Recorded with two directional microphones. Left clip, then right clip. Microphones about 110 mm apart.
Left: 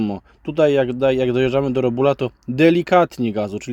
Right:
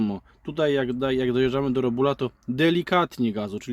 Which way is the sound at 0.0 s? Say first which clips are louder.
Left 5 dB; 30° left (ahead or behind).